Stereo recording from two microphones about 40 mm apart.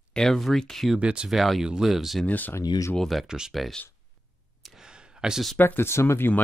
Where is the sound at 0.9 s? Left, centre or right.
Right.